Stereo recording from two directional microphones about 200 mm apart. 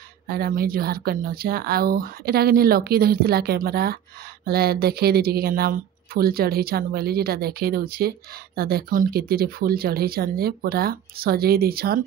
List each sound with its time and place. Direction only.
0.3 s speech: 50° right (ahead or behind)